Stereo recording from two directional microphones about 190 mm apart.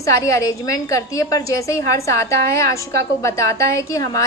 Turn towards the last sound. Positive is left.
turn(degrees=15)  # may be behind; listen again after turning